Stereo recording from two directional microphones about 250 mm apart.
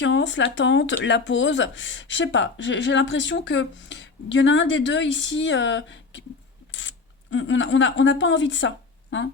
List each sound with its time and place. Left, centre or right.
0.0 s speech: left